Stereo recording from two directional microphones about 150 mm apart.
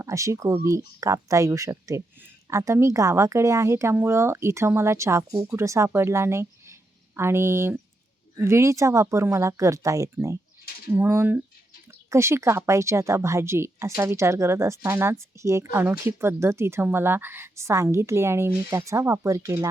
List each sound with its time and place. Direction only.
0.0 s a woman's voice: 20° right (ahead or behind)